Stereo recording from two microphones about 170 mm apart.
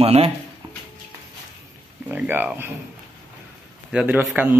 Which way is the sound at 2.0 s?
10° right (ahead or behind).